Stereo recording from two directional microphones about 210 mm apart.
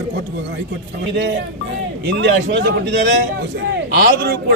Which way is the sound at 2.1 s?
60° right (ahead or behind).